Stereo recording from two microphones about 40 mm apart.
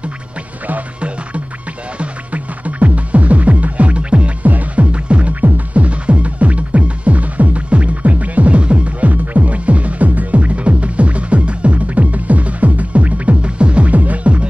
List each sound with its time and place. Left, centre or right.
2.0 s music: right
4.5 s music: right
13.9 s music: right